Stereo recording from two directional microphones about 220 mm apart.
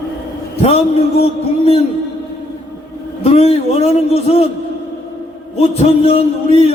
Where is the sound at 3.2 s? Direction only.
25° left (ahead or behind).